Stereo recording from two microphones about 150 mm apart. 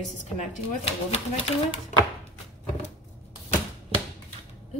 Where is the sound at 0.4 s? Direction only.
40° left (ahead or behind).